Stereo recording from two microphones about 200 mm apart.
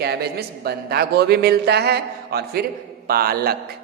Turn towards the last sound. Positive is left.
turn(degrees=-50)  # may be behind; listen again after turning